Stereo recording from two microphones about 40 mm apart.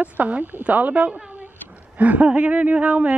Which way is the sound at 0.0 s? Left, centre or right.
Right.